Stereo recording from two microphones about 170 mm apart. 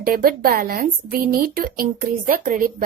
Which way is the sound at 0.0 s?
60° right (ahead or behind).